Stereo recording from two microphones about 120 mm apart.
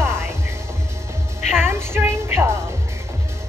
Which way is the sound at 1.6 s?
20° right (ahead or behind).